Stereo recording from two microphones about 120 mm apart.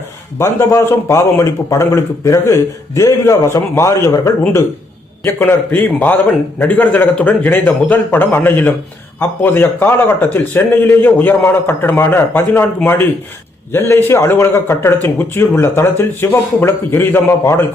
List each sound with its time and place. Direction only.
0.3 s a man's voice: 25° left (ahead or behind)